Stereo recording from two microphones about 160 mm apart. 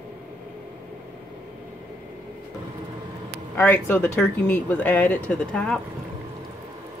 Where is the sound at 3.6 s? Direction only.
15° left (ahead or behind).